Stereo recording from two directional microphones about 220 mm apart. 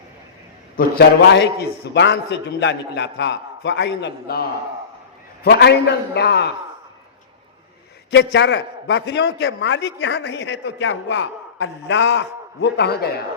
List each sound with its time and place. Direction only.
0.8 s a man's voice: 50° left (ahead or behind)
8.1 s a man's voice: 55° left (ahead or behind)